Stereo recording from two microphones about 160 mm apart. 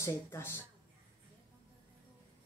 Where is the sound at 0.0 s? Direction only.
15° left (ahead or behind).